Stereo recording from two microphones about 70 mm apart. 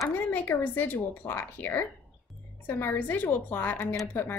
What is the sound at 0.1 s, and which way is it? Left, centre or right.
A woman's voice, left.